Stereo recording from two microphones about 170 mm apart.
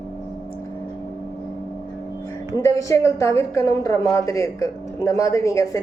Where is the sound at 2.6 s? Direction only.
20° left (ahead or behind).